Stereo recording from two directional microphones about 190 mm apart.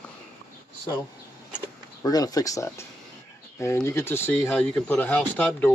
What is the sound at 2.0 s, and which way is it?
Speech, 20° left (ahead or behind).